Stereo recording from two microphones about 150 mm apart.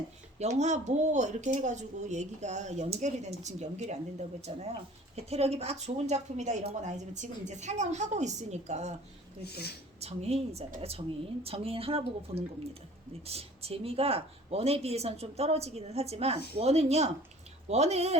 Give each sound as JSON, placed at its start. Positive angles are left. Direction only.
{"t": 0.3, "sound": "speech", "side_deg": -50}
{"t": 9.4, "sound": "speech", "side_deg": 90}
{"t": 10.0, "sound": "a woman's voice", "side_deg": -45}